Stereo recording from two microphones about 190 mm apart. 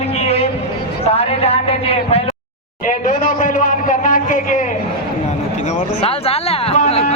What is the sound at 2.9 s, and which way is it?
A man's voice, 45° left (ahead or behind).